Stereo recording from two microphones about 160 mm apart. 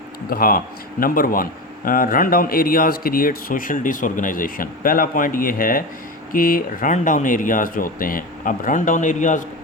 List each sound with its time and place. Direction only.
0.3 s speech: 65° left (ahead or behind)